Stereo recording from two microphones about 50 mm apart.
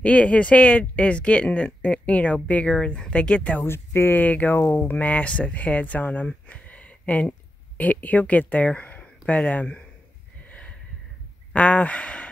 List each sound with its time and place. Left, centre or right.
0.0 s speech: left
3.6 s speech: left
4.2 s speech: left
6.2 s a sound: left
9.5 s speech: left
10.5 s a sound: left
11.5 s speech: left